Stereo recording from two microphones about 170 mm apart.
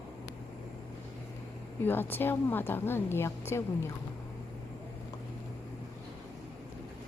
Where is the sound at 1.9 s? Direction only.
10° left (ahead or behind).